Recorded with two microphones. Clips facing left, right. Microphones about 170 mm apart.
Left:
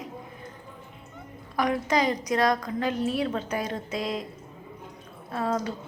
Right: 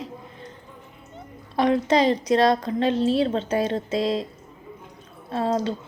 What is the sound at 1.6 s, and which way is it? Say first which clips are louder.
Speech: right 5 dB; 25° right (ahead or behind).